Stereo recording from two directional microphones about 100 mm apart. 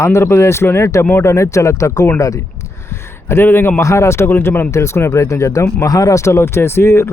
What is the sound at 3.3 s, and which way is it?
Speech, 25° left (ahead or behind).